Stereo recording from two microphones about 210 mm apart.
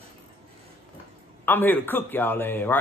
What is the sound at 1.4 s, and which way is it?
A man's voice, 10° left (ahead or behind).